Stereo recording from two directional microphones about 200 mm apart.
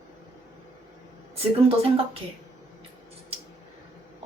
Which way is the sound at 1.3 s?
30° right (ahead or behind).